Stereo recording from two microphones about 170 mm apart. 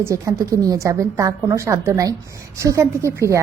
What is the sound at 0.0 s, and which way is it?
A woman's voice, 20° right (ahead or behind).